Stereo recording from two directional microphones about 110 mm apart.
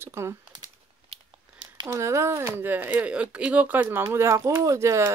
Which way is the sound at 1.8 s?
25° right (ahead or behind).